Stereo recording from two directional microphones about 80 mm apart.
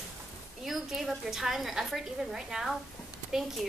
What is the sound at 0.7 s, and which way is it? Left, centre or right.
A woman's voice, centre.